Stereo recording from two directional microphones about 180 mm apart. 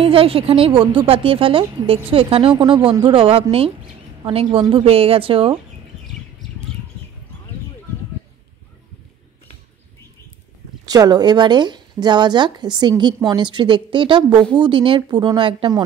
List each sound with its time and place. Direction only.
0.0 s speech: 30° right (ahead or behind)
10.9 s speech: 20° right (ahead or behind)